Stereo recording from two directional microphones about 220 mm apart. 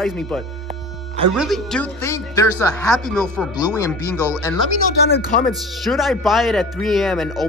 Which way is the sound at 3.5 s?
15° left (ahead or behind).